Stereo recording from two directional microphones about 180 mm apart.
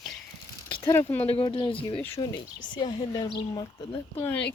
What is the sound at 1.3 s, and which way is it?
Speech, 30° left (ahead or behind).